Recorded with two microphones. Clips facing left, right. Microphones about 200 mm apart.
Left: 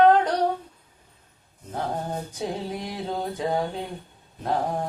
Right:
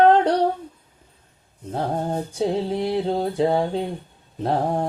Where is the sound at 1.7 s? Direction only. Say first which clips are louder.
Right 5 dB; 30° right (ahead or behind).